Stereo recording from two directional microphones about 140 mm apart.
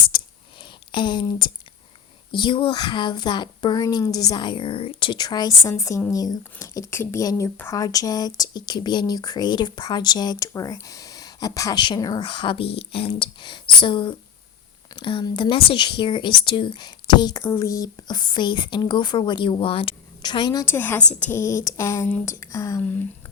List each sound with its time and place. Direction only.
0.9 s speech: 35° left (ahead or behind)
2.3 s speech: 35° left (ahead or behind)
17.4 s speech: 20° left (ahead or behind)
20.7 s a woman's voice: 15° left (ahead or behind)